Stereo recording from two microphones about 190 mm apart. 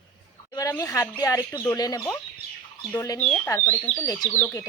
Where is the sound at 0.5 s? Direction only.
15° left (ahead or behind).